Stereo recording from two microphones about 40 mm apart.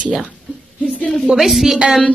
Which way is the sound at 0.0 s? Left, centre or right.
Right.